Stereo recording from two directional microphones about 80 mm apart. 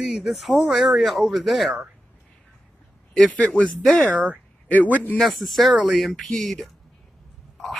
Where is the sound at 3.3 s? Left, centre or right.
Centre.